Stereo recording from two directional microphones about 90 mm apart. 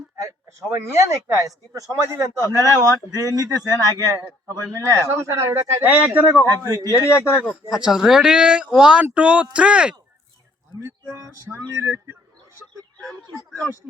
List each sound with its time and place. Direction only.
0.2 s a sound: 35° right (ahead or behind)
0.7 s speech: 35° right (ahead or behind)
5.9 s speech: 20° right (ahead or behind)
6.4 s speech: 40° right (ahead or behind)
6.9 s speech: 30° left (ahead or behind)
7.7 s speech: 5° right (ahead or behind)
10.8 s speech: 30° right (ahead or behind)
13.0 s speech: 5° left (ahead or behind)